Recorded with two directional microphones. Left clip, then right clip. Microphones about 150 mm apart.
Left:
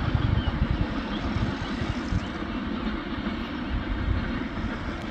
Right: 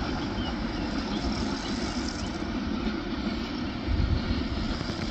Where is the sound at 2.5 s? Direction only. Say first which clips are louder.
Even; 5° left (ahead or behind).